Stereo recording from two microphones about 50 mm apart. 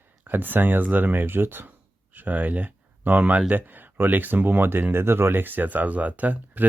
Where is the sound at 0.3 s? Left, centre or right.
Right.